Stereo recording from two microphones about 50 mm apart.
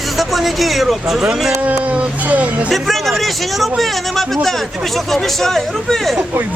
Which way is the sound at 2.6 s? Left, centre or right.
Centre.